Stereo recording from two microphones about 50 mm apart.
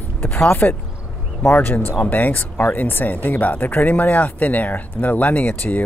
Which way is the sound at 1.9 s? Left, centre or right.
Left.